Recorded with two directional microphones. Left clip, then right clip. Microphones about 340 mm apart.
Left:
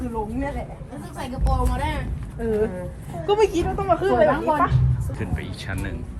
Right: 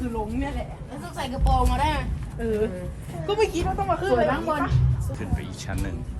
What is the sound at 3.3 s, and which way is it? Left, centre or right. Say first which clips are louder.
A woman's voice: left 4 dB; centre.